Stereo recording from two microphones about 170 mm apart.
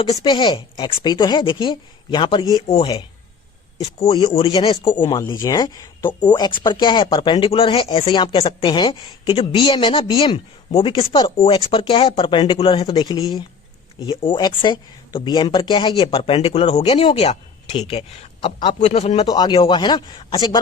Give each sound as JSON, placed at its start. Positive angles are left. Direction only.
{"t": 0.0, "sound": "speech", "side_deg": 25}
{"t": 4.1, "sound": "speech", "side_deg": 30}
{"t": 19.2, "sound": "speech", "side_deg": 25}